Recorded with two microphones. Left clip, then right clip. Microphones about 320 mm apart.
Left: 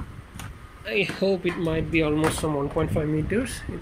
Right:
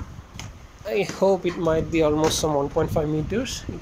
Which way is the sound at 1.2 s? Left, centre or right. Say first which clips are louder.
Right 6 dB; right.